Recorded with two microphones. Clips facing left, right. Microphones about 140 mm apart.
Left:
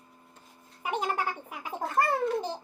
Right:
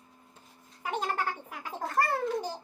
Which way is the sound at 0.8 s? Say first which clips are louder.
Left 2 dB; 15° left (ahead or behind).